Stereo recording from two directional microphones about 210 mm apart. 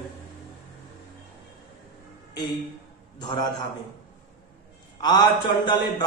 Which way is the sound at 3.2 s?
20° left (ahead or behind).